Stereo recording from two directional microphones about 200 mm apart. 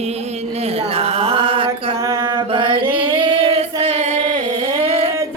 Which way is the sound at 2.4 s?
25° right (ahead or behind).